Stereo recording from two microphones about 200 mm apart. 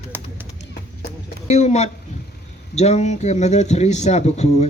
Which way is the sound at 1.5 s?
35° left (ahead or behind).